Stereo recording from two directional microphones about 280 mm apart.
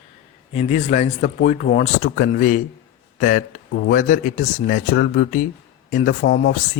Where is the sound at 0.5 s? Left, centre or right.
Left.